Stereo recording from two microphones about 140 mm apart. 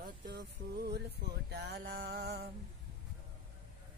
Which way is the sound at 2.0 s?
90° right.